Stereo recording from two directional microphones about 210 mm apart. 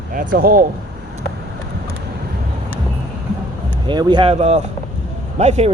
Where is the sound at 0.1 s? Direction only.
40° right (ahead or behind).